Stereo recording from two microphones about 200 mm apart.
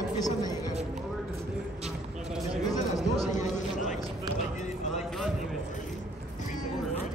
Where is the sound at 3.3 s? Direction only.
40° left (ahead or behind).